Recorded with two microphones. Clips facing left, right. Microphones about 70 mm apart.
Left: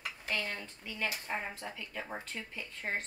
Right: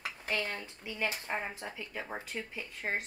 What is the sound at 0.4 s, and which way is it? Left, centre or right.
A woman's voice, centre.